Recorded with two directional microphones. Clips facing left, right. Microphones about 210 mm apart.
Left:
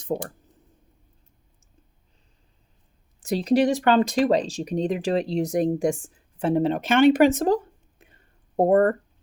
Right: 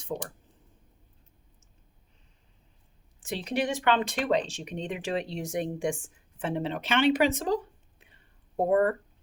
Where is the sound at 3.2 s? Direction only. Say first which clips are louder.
Left 9 dB; 40° left (ahead or behind).